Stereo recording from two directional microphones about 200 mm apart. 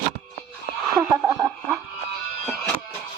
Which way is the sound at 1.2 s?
20° right (ahead or behind).